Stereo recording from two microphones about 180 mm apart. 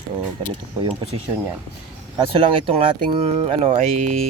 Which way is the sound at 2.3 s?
30° right (ahead or behind).